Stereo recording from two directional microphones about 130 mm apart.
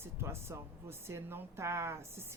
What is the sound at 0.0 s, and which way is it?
Speech, 20° right (ahead or behind).